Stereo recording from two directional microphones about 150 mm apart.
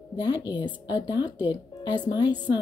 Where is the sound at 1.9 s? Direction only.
30° left (ahead or behind).